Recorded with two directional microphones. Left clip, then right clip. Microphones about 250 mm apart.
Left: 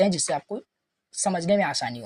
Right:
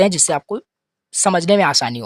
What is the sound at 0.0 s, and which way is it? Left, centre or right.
Speech, right.